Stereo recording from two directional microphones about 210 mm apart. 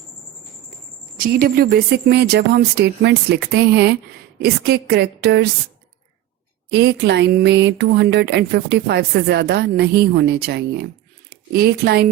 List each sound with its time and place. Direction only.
1.2 s speech: 45° right (ahead or behind)
6.7 s a woman's voice: 50° right (ahead or behind)